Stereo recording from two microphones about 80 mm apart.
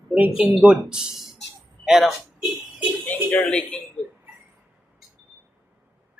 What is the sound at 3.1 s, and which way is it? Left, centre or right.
Speech, centre.